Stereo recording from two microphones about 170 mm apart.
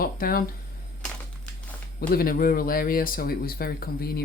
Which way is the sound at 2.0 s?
60° left (ahead or behind).